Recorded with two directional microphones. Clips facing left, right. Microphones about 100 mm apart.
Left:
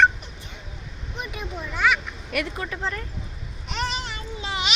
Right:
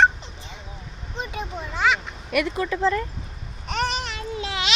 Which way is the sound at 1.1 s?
30° right (ahead or behind).